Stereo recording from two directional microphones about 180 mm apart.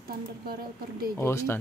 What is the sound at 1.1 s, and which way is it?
Speech, 15° left (ahead or behind).